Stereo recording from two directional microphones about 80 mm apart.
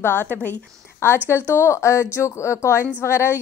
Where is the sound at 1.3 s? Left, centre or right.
Left.